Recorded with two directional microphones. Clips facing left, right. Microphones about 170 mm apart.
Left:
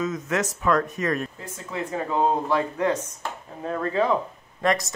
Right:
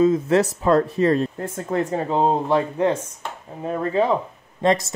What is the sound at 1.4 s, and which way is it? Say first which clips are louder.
Speech: right 8 dB; 55° right (ahead or behind).